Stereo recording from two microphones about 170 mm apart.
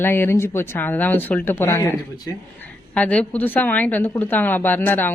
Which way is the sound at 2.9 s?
5° left (ahead or behind).